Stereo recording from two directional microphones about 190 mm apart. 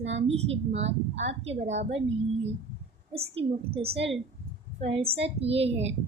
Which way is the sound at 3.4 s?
30° right (ahead or behind).